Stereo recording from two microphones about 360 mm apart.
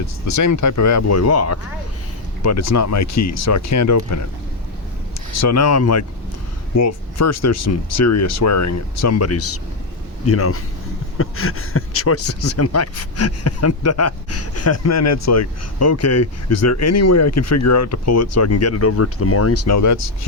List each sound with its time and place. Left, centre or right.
0.3 s speech: left
5.3 s speech: left